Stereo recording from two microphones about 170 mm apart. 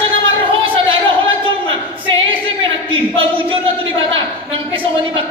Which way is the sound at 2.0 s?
30° right (ahead or behind).